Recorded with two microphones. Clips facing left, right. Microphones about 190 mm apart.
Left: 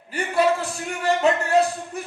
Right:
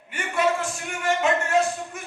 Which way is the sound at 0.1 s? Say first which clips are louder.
Left 3 dB; 35° left (ahead or behind).